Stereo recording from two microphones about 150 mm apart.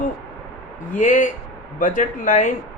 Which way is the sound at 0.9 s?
55° left (ahead or behind).